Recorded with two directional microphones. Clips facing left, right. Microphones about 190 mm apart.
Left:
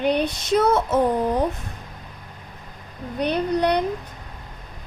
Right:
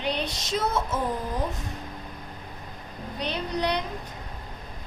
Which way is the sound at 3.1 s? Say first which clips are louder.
Left 8 dB; 55° left (ahead or behind).